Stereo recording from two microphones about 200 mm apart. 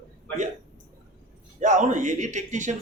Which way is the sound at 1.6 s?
40° right (ahead or behind).